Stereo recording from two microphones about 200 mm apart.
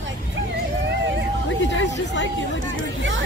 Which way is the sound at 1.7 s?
65° left (ahead or behind).